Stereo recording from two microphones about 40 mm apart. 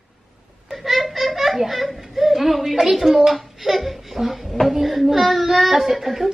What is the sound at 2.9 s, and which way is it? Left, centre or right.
Speech, centre.